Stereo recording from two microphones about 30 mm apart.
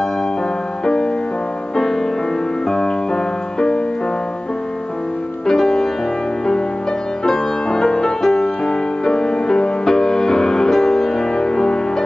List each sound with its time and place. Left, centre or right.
3.5 s music: left
5.5 s music: centre
7.2 s music: centre